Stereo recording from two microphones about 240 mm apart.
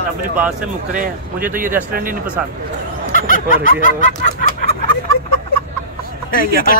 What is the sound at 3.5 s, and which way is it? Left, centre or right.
Snicker, left.